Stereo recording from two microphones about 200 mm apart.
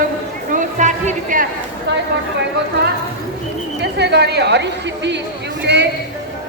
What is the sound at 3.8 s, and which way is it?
A man's voice, 55° right (ahead or behind).